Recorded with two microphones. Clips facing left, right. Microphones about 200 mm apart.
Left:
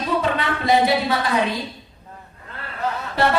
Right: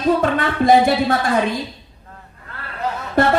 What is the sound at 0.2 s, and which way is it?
A woman's voice, 50° right (ahead or behind).